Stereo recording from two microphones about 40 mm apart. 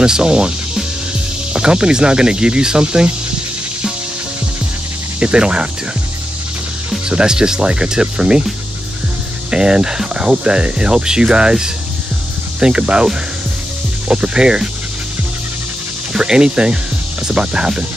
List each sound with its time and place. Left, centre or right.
0.0 s speech: centre
1.5 s speech: right
5.2 s speech: right
7.1 s speech: centre
9.5 s speech: right
12.5 s speech: right
14.0 s speech: right
16.1 s speech: centre